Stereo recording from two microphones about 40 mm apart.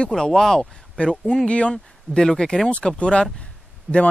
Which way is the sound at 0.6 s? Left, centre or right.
Left.